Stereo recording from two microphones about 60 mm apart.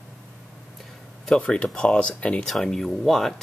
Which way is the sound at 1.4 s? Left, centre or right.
Left.